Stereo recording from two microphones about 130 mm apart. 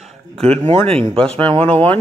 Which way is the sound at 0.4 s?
55° right (ahead or behind).